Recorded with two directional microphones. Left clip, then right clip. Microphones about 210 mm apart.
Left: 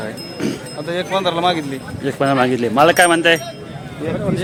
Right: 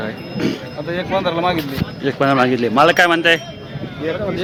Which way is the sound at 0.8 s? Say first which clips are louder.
Left 1 dB; 30° left (ahead or behind).